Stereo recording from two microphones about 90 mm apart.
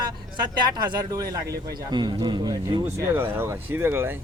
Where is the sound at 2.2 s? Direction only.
50° right (ahead or behind).